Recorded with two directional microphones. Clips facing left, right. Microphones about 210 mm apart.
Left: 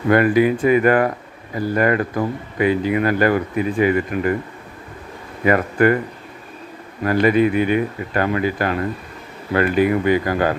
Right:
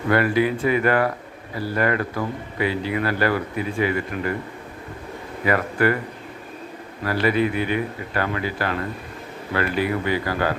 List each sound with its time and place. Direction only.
0.1 s speech: 15° left (ahead or behind)
5.5 s speech: 20° left (ahead or behind)
7.0 s speech: 20° left (ahead or behind)